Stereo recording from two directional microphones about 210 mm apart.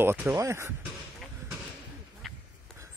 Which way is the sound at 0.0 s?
10° right (ahead or behind).